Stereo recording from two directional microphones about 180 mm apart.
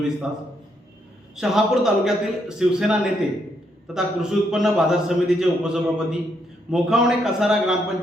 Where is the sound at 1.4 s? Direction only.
Centre (ahead or behind).